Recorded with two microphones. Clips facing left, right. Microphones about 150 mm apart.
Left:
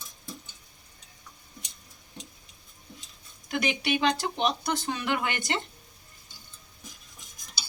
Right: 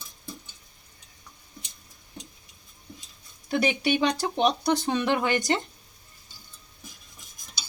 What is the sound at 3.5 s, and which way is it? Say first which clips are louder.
Speech: right 4 dB; 35° right (ahead or behind).